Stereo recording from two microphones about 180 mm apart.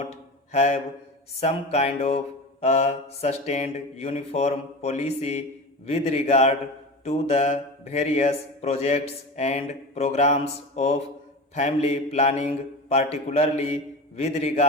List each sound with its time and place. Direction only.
0.5 s mantra: 35° left (ahead or behind)